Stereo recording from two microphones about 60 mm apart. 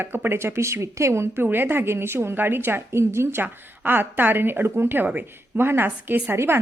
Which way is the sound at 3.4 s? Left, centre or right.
Right.